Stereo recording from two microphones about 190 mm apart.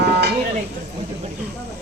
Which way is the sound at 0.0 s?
60° right (ahead or behind).